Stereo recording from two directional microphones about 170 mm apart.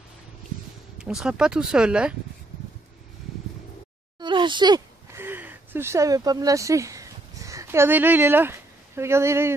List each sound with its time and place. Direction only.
0.9 s speech: 5° right (ahead or behind)
4.2 s a sound: 30° right (ahead or behind)
5.2 s speech: 10° right (ahead or behind)